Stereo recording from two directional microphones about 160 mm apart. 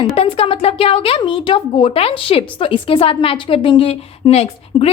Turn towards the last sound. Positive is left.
turn(degrees=40)  # may be behind; listen again after turning